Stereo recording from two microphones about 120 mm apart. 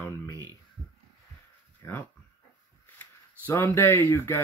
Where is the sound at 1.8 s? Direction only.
20° left (ahead or behind).